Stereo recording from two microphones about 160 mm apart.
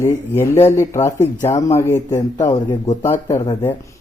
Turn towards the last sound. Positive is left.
turn(degrees=20)  # may be behind; listen again after turning